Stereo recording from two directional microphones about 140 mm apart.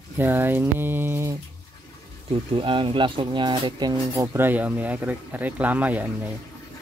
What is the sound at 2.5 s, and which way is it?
Speech, 40° right (ahead or behind).